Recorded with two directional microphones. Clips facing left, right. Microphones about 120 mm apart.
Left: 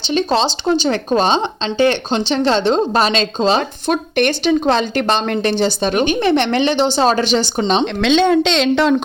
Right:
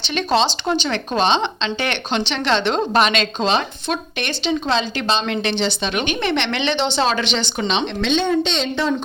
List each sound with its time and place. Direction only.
0.0 s a woman's voice: 30° left (ahead or behind)
4.2 s speech: 50° left (ahead or behind)
8.0 s a woman's voice: 90° left